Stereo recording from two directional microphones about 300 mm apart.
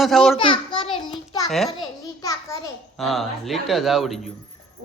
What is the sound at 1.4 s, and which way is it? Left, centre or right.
Speech, centre.